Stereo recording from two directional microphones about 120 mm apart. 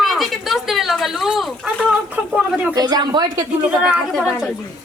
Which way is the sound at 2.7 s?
35° right (ahead or behind).